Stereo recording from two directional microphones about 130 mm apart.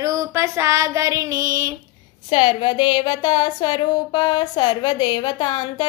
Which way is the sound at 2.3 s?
35° left (ahead or behind).